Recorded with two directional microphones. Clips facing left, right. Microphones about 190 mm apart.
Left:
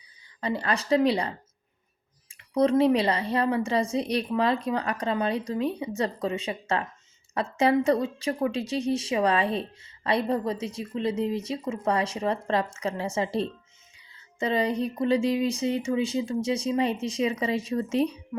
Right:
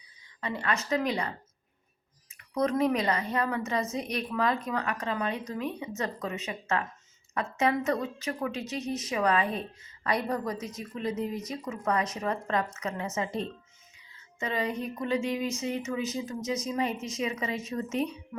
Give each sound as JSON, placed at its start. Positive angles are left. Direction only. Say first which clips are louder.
{"t": 0.4, "sound": "a woman's voice", "louder": "left 4 dB", "side_deg": 35}
{"t": 2.6, "sound": "a woman's voice", "louder": "left 5 dB", "side_deg": 30}